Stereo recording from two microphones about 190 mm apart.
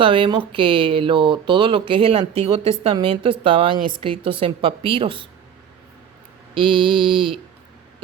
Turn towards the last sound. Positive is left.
turn(degrees=-25)  # may be behind; listen again after turning